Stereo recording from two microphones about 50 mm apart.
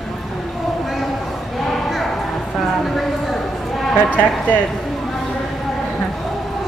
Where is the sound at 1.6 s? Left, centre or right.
Centre.